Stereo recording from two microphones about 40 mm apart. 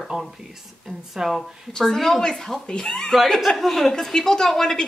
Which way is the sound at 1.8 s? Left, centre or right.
Centre.